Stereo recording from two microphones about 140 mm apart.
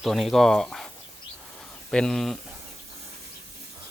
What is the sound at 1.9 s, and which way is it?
Speech, 5° left (ahead or behind).